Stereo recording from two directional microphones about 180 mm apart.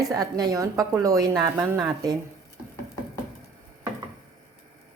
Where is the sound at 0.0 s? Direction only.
20° right (ahead or behind).